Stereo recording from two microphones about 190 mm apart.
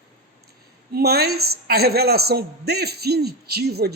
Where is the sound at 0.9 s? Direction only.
55° right (ahead or behind).